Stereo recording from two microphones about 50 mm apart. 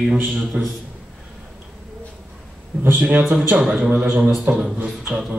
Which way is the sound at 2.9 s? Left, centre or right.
Right.